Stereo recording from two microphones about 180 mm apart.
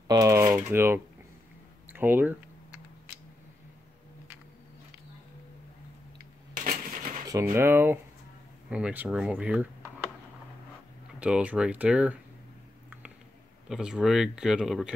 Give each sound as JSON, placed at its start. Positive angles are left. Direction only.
{"t": 0.1, "sound": "speech", "side_deg": -20}
{"t": 1.9, "sound": "typing", "side_deg": -10}
{"t": 6.5, "sound": "coin", "side_deg": -50}
{"t": 7.5, "sound": "speech", "side_deg": -15}
{"t": 11.1, "sound": "speech", "side_deg": -5}
{"t": 13.7, "sound": "speech", "side_deg": -5}